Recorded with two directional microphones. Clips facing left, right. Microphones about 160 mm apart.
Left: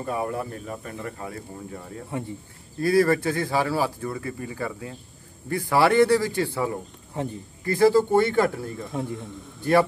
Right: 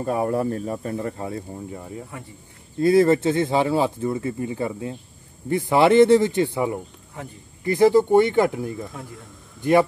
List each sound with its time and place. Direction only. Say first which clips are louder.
0.0 s speech: right 6 dB; 35° right (ahead or behind)
2.1 s speech: left 7 dB; 25° left (ahead or behind)
2.8 s speech: right 4 dB; 20° right (ahead or behind)
7.2 s speech: left 7 dB; 30° left (ahead or behind)
7.6 s speech: right 2 dB; 20° right (ahead or behind)
9.0 s a man's voice: left 8 dB; centre (ahead or behind)
9.6 s speech: right 2 dB; 20° right (ahead or behind)